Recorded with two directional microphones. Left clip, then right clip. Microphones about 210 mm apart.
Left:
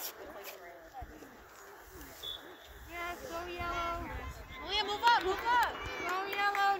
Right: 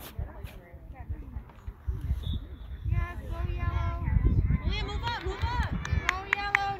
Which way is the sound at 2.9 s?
45° left (ahead or behind).